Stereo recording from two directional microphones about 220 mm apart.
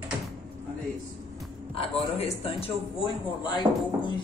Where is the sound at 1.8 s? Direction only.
30° left (ahead or behind).